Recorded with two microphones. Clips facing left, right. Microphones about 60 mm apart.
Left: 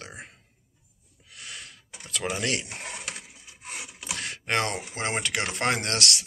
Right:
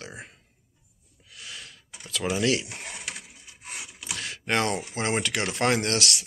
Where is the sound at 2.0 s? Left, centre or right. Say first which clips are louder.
Right 2 dB; left.